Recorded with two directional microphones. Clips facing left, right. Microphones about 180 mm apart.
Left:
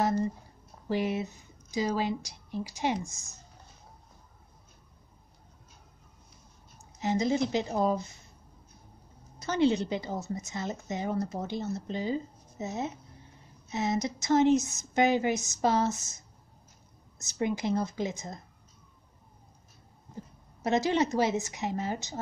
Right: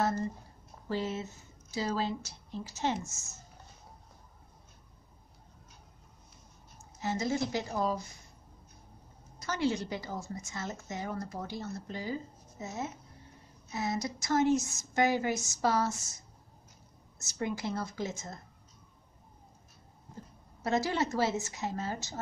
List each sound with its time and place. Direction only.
0.0 s speech: 15° left (ahead or behind)
7.0 s a woman's voice: 20° left (ahead or behind)
9.4 s a woman's voice: 20° left (ahead or behind)
17.2 s a woman's voice: 20° left (ahead or behind)
20.6 s a woman's voice: 20° left (ahead or behind)